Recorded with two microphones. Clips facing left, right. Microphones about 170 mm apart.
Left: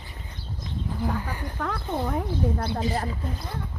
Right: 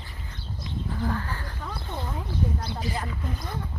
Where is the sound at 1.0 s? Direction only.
15° left (ahead or behind).